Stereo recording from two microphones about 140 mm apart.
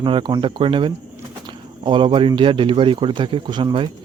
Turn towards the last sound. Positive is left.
turn(degrees=-35)  # may be behind; listen again after turning